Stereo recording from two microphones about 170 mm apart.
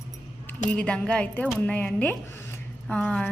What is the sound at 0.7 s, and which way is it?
A woman's voice, 5° left (ahead or behind).